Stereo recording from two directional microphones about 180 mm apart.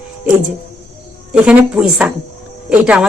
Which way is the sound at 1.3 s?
5° right (ahead or behind).